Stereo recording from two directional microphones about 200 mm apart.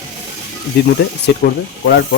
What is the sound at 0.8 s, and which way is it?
Speech, 55° left (ahead or behind).